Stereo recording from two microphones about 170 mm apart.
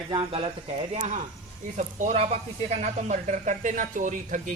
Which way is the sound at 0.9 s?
40° right (ahead or behind).